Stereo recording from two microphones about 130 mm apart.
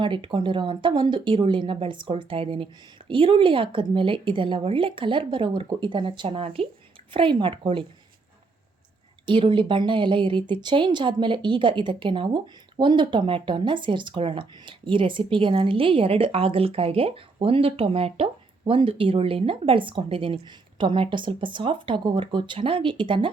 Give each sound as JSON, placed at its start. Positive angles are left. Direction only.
{"t": 0.0, "sound": "a woman's voice", "side_deg": -40}
{"t": 9.2, "sound": "a woman's voice", "side_deg": -40}